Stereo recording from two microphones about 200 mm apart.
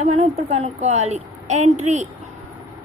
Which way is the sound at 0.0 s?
35° right (ahead or behind).